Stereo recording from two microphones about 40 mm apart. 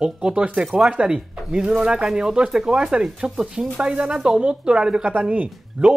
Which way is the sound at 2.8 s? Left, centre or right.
Right.